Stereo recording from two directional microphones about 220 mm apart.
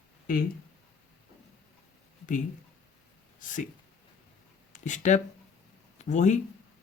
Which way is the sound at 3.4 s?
35° left (ahead or behind).